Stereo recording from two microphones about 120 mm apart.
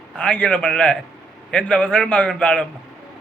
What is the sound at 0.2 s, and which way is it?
A man's voice, 15° left (ahead or behind).